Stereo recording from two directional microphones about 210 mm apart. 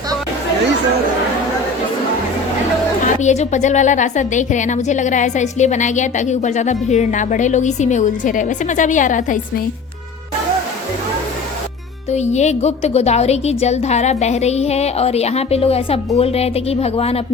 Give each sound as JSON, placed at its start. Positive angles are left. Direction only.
{"t": 3.2, "sound": "a woman's voice", "side_deg": 35}
{"t": 12.1, "sound": "a woman's voice", "side_deg": 35}